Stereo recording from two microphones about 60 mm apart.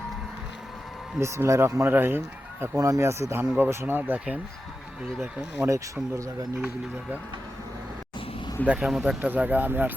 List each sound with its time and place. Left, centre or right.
1.2 s speech: right
1.9 s speech: right
2.7 s speech: right
3.0 s speech: right
3.6 s speech: right
5.6 s speech: right
8.6 s speech: right
8.9 s speech: centre
9.2 s speech: right